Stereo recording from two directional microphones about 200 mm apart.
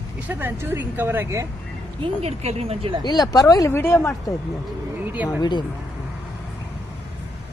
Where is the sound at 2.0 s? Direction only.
30° right (ahead or behind).